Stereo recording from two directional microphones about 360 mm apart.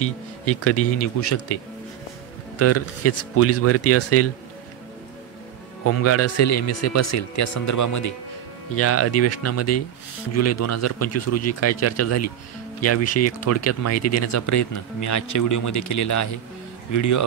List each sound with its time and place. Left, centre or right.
0.0 s speech: left
2.6 s speech: left
5.9 s speech: left
8.7 s speech: left